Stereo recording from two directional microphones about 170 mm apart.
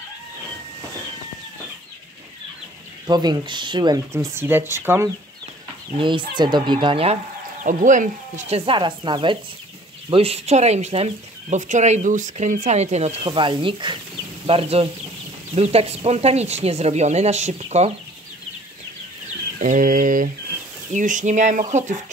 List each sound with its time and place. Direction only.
3.1 s speech: 25° right (ahead or behind)
5.9 s speech: 30° right (ahead or behind)
7.6 s speech: 50° right (ahead or behind)
19.6 s speech: 50° right (ahead or behind)